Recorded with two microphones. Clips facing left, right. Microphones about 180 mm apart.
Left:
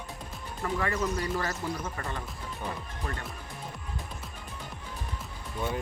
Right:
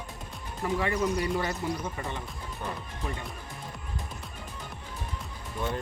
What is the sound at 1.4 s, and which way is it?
Speech, 15° right (ahead or behind).